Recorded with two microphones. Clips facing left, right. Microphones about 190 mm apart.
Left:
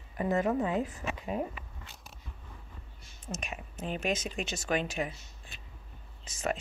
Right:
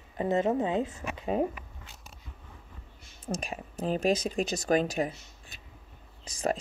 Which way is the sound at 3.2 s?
35° right (ahead or behind).